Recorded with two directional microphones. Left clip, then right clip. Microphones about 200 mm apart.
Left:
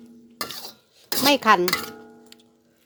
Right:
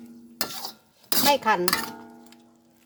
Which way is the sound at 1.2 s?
45° left (ahead or behind).